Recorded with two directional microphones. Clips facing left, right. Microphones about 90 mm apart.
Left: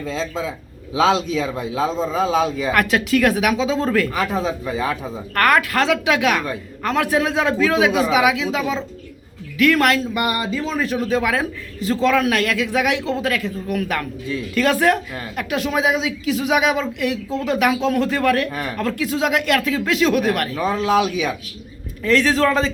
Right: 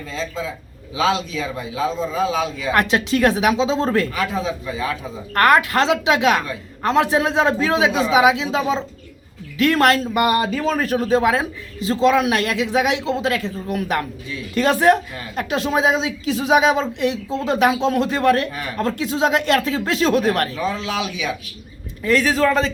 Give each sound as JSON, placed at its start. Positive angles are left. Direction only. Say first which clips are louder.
{"t": 0.0, "sound": "speech", "louder": "left 2 dB", "side_deg": 85}
{"t": 0.9, "sound": "a man's voice", "louder": "left 3 dB", "side_deg": 65}
{"t": 2.7, "sound": "a woman's voice", "louder": "right 1 dB", "side_deg": -25}
{"t": 4.4, "sound": "speech", "louder": "left 2 dB", "side_deg": 50}
{"t": 5.3, "sound": "a woman's voice", "louder": "right 2 dB", "side_deg": -25}
{"t": 10.2, "sound": "a woman's voice", "louder": "right 4 dB", "side_deg": -55}
{"t": 20.6, "sound": "speech", "louder": "left 5 dB", "side_deg": 50}
{"t": 22.0, "sound": "a man's voice", "louder": "even", "side_deg": -10}